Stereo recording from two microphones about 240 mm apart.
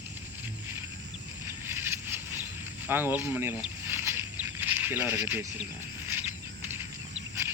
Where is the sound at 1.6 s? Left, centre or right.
Centre.